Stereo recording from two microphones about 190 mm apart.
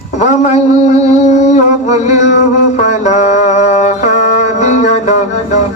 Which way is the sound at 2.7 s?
40° left (ahead or behind).